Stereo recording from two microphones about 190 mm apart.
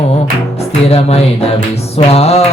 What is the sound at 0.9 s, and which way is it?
Music, 30° left (ahead or behind).